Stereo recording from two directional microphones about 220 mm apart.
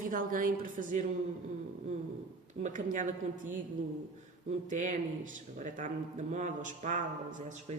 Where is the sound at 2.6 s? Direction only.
35° right (ahead or behind).